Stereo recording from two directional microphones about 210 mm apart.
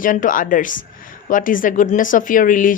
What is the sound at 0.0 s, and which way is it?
A woman's voice, 40° left (ahead or behind).